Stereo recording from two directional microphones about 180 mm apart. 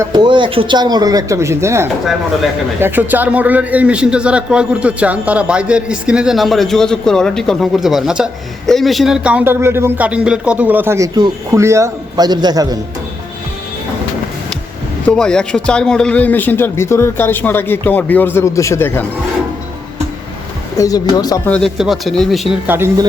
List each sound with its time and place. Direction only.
0.0 s a man's voice: 25° right (ahead or behind)
15.0 s a man's voice: 5° left (ahead or behind)
20.7 s speech: 20° left (ahead or behind)
21.5 s speech: centre (ahead or behind)